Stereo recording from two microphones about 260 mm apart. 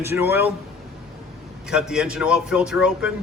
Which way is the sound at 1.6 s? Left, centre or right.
Centre.